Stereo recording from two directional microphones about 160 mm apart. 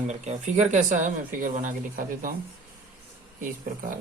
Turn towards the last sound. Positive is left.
turn(degrees=-60)  # may be behind; listen again after turning